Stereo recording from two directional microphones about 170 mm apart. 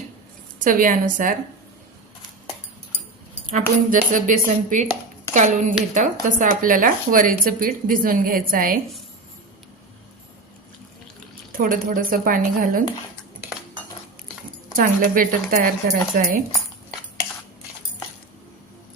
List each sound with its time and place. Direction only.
0.6 s speech: 55° right (ahead or behind)
3.5 s speech: 50° right (ahead or behind)
11.5 s speech: 55° right (ahead or behind)
15.1 s speech: 55° right (ahead or behind)